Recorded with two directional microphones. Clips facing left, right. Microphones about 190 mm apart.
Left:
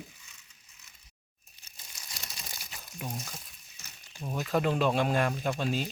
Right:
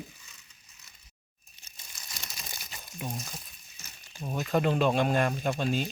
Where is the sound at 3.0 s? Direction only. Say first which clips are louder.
Right 1 dB; 10° right (ahead or behind).